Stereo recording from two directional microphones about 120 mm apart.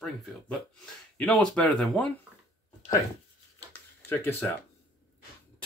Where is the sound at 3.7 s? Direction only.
15° left (ahead or behind).